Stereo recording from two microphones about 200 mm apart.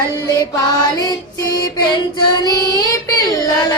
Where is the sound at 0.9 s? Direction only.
20° left (ahead or behind).